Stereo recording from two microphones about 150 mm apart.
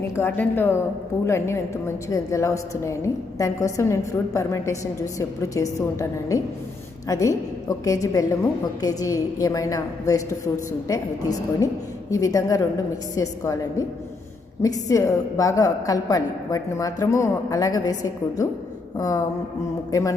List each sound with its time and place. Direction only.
0.2 s a woman's voice: 15° left (ahead or behind)
18.9 s a woman's voice: 25° left (ahead or behind)